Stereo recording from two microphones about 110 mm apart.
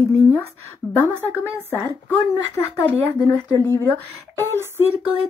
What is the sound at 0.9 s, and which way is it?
Speech, 25° left (ahead or behind).